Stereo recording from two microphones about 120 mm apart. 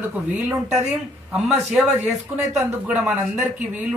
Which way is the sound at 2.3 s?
5° right (ahead or behind).